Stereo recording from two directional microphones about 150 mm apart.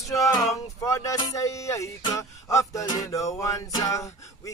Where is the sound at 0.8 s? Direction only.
20° left (ahead or behind).